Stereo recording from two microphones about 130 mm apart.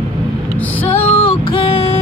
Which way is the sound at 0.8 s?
15° left (ahead or behind).